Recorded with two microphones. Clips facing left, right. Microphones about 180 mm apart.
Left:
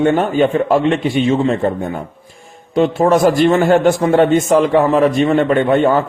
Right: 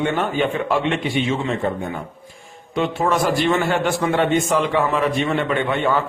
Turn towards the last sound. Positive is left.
turn(degrees=40)  # may be behind; listen again after turning